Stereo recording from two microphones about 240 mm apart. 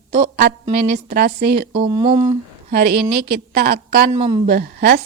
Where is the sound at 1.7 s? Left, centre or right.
Right.